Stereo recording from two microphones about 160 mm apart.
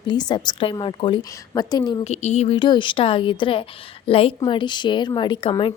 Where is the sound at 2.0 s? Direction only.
45° left (ahead or behind).